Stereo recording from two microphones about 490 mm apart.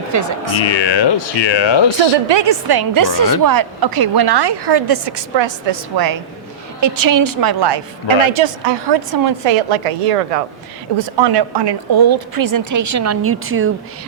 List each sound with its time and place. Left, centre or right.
0.1 s a woman's voice: right
0.6 s speech: left
2.2 s a woman's voice: right
10.9 s a woman's voice: right